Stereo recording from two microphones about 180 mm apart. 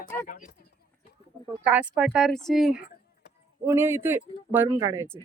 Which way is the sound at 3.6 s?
15° right (ahead or behind).